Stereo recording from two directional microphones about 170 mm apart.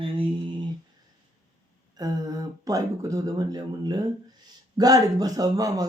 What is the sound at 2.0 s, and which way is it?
A man's voice, 20° right (ahead or behind).